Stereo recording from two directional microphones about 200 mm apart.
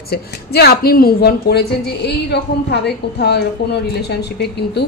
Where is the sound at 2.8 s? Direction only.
55° left (ahead or behind).